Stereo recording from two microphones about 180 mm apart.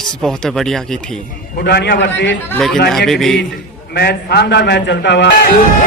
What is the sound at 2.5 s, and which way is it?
Speech, centre (ahead or behind).